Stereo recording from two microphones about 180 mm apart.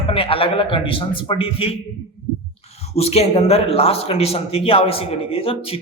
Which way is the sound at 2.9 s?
35° left (ahead or behind).